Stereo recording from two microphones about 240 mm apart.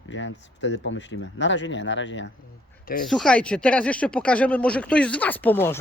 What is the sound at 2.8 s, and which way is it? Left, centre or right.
Speech, left.